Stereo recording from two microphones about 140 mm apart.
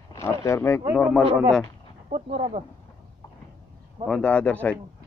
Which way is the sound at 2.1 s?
45° right (ahead or behind).